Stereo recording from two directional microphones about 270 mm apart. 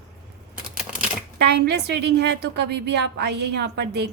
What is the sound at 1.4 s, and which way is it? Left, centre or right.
A woman's voice, right.